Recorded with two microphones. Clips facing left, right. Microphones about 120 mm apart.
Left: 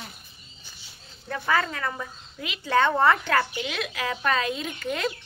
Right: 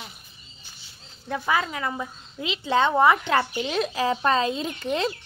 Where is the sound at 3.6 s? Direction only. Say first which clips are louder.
Right 6 dB; 35° right (ahead or behind).